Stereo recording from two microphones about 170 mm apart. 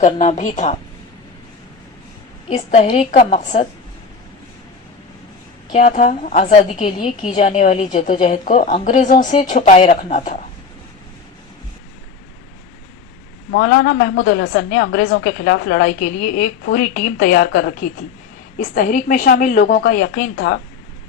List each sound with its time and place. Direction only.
0.0 s a woman's voice: 45° left (ahead or behind)
2.5 s a woman's voice: 45° left (ahead or behind)
5.7 s a woman's voice: 45° left (ahead or behind)
13.5 s a woman's voice: 80° left
15.2 s a woman's voice: 65° left (ahead or behind)
20.3 s a woman's voice: 85° left